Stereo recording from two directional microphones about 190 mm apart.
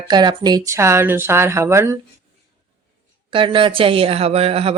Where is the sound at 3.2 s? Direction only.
25° right (ahead or behind).